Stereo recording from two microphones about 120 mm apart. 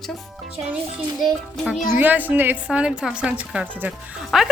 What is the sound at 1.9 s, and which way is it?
A woman's voice, 15° right (ahead or behind).